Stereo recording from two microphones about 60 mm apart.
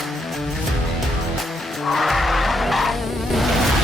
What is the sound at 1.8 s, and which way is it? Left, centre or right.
Vehicle, centre.